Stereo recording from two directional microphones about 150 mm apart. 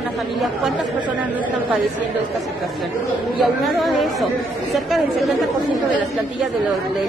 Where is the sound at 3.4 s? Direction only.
Centre (ahead or behind).